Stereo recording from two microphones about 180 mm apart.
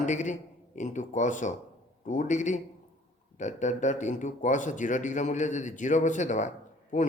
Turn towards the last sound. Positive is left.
turn(degrees=40)  # may be behind; listen again after turning